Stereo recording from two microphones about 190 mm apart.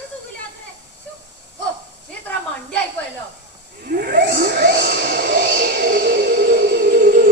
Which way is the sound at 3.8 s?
55° right (ahead or behind).